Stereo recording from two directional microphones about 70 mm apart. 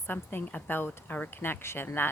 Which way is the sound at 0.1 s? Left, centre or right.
Left.